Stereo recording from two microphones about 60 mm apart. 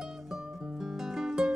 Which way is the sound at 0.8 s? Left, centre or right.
Centre.